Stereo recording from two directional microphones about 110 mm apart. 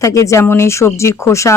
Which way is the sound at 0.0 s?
30° left (ahead or behind).